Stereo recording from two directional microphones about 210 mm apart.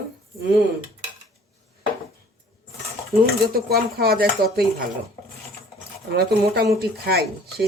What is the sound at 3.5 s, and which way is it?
Speech, 45° right (ahead or behind).